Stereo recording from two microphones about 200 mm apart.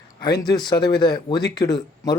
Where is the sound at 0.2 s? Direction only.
20° left (ahead or behind).